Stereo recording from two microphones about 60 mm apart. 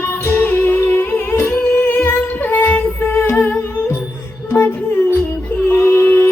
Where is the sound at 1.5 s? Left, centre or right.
Left.